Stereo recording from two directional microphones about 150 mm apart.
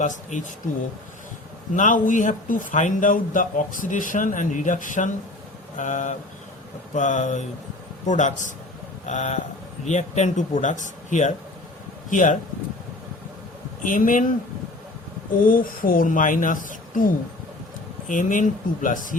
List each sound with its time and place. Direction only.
0.0 s speech: 55° left (ahead or behind)
1.7 s a man's voice: 60° left (ahead or behind)
13.8 s speech: 60° left (ahead or behind)
15.4 s speech: 70° left (ahead or behind)
18.1 s speech: 60° left (ahead or behind)